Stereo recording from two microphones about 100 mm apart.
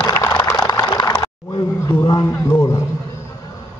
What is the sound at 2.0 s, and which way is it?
Speech, 45° left (ahead or behind).